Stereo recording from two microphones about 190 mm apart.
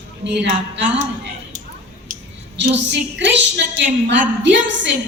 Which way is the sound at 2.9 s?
65° right (ahead or behind).